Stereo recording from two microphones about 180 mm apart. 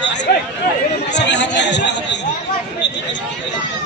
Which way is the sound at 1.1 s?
75° left (ahead or behind).